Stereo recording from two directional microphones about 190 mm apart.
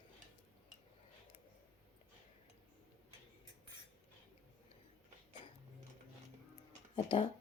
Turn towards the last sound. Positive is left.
turn(degrees=25)  # may be behind; listen again after turning